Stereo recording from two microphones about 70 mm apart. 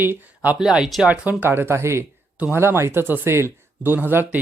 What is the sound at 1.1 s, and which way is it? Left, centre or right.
Speech, right.